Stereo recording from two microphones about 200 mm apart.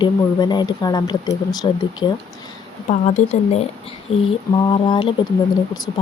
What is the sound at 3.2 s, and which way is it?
Speech, 35° left (ahead or behind).